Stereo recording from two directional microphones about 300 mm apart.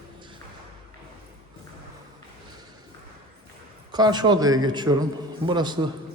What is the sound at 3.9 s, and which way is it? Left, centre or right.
A man's voice, centre.